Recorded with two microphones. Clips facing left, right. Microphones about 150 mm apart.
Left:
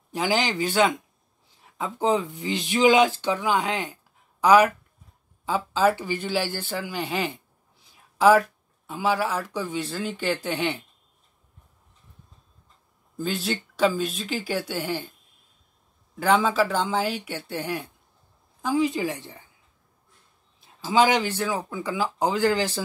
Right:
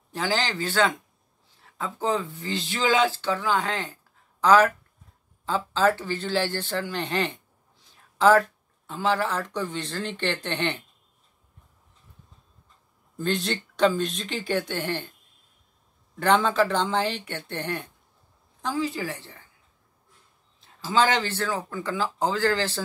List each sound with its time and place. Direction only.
0.1 s speech: 15° left (ahead or behind)
13.2 s speech: 5° left (ahead or behind)
16.2 s speech: 5° left (ahead or behind)
20.6 s speech: 10° left (ahead or behind)